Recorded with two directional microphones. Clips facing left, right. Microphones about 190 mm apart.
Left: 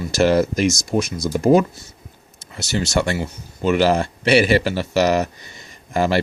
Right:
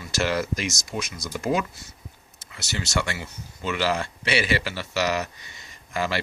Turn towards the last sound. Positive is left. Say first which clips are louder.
# left 8 dB
turn(degrees=45)  # may be behind; listen again after turning